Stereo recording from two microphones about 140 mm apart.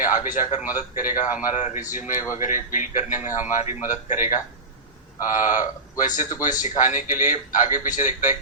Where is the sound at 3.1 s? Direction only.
15° right (ahead or behind).